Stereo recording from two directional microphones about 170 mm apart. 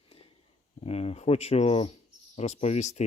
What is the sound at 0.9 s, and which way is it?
Speech, 35° left (ahead or behind).